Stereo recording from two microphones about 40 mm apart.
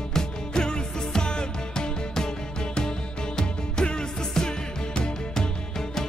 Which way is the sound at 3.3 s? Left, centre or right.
Centre.